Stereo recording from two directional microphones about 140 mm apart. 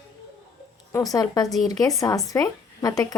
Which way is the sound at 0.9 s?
25° left (ahead or behind).